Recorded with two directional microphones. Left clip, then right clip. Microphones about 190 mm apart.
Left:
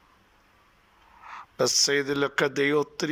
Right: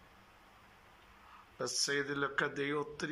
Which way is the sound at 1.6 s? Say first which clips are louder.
Left 12 dB; 35° left (ahead or behind).